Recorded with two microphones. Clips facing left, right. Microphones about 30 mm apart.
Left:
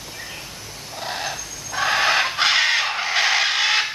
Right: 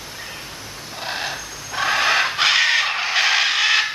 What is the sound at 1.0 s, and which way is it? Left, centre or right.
Vehicle, centre.